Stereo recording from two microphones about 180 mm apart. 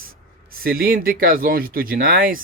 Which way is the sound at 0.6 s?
55° right (ahead or behind).